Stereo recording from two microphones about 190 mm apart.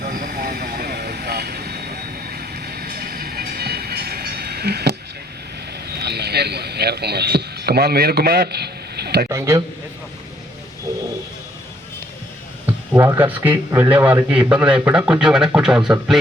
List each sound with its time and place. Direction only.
0.0 s vehicle: 50° right (ahead or behind)
5.9 s speech: 60° right (ahead or behind)
9.3 s a man's voice: 15° right (ahead or behind)
12.6 s a sound: 10° right (ahead or behind)
13.3 s a man's voice: 10° right (ahead or behind)